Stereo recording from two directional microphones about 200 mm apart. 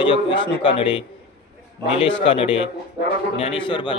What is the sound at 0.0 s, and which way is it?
A man's voice, 25° left (ahead or behind).